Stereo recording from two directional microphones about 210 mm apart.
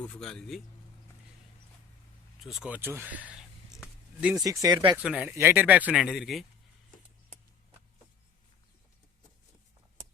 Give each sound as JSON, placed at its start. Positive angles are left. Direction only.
{"t": 0.0, "sound": "speech", "side_deg": 5}
{"t": 2.4, "sound": "a sound", "side_deg": 0}
{"t": 4.6, "sound": "speech", "side_deg": -20}
{"t": 5.0, "sound": "speech", "side_deg": -5}